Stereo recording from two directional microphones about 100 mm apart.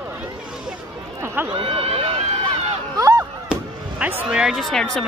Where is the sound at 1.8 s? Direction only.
75° right (ahead or behind).